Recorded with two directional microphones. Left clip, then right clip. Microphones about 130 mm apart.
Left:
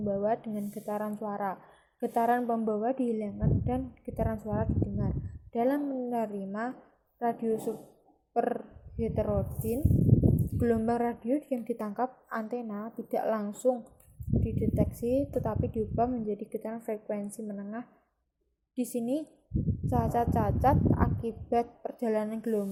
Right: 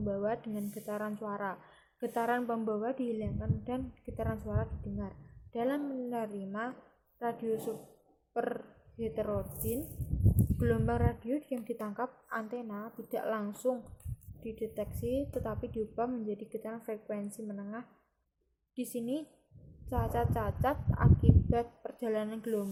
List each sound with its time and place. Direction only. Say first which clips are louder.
0.0 s a woman's voice: left 5 dB; 10° left (ahead or behind)